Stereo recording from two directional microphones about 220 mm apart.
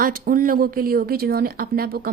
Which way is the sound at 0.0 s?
40° right (ahead or behind).